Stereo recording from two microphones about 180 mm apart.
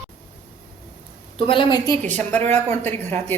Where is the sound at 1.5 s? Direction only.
25° left (ahead or behind).